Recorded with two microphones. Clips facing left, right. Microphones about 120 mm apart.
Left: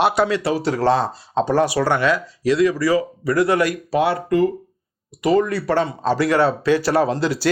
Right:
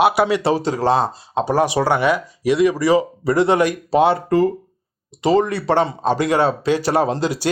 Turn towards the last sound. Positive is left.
turn(degrees=-20)  # may be behind; listen again after turning